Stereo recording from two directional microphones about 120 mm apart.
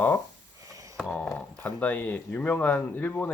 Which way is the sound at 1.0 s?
15° left (ahead or behind).